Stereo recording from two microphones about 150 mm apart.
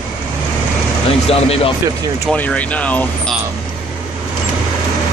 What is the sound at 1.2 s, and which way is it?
Speech, 40° left (ahead or behind).